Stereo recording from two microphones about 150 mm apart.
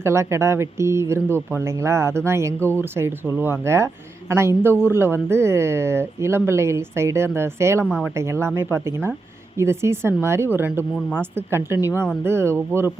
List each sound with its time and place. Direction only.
0.0 s speech: 20° right (ahead or behind)
2.6 s speech: 10° left (ahead or behind)
2.8 s speech: 15° right (ahead or behind)